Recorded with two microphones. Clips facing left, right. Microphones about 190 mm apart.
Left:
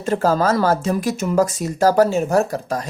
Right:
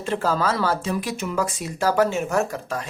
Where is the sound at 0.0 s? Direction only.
45° left (ahead or behind).